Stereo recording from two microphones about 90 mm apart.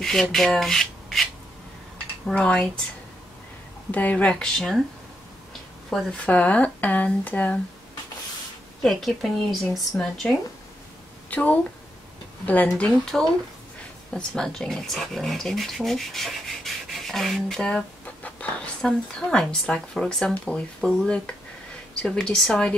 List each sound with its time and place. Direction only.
0.0 s rub: 5° left (ahead or behind)
2.3 s speech: 10° left (ahead or behind)
3.9 s speech: 15° left (ahead or behind)
5.9 s speech: 10° left (ahead or behind)
8.8 s a woman's voice: centre (ahead or behind)
11.2 s a woman's voice: 20° left (ahead or behind)
12.7 s speech: 10° left (ahead or behind)